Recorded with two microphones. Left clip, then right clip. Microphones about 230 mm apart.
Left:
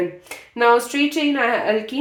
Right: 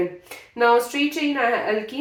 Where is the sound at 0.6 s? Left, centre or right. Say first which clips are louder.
Left 2 dB; left.